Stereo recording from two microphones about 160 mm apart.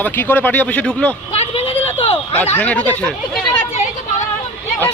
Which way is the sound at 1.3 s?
40° left (ahead or behind).